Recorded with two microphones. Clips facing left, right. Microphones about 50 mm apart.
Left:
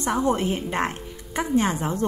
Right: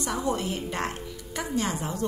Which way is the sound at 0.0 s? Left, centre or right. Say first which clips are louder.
Left 6 dB; left.